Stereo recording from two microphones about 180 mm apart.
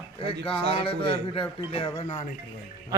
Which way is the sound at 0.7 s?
30° left (ahead or behind).